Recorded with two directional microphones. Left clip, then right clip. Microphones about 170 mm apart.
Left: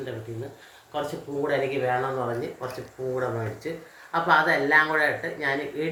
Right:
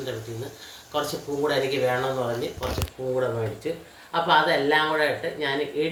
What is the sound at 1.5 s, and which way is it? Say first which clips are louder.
Speech: right 1 dB; 5° left (ahead or behind).